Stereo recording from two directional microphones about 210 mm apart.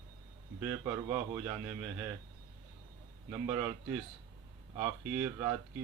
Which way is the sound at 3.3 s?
10° right (ahead or behind).